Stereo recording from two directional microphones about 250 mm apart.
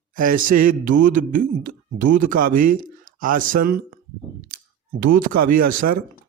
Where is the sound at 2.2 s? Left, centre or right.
Right.